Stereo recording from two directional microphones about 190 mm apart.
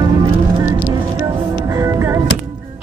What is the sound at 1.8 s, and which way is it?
Music, 15° right (ahead or behind).